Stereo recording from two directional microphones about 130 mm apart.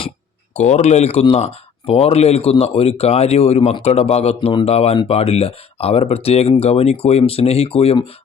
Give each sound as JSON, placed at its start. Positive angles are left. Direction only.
{"t": 0.5, "sound": "speech", "side_deg": 60}